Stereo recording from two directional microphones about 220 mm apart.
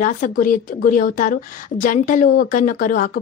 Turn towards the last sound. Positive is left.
turn(degrees=40)  # may be behind; listen again after turning